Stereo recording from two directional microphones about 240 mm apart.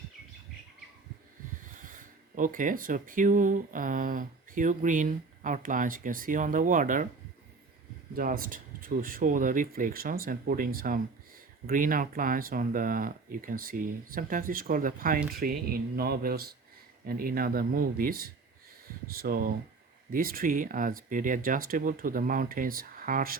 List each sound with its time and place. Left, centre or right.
1.8 s speech: right
8.1 s speech: right